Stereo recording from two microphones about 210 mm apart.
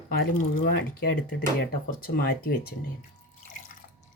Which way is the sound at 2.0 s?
45° left (ahead or behind).